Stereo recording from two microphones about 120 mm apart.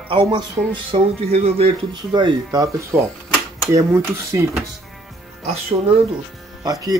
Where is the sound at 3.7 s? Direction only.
25° right (ahead or behind).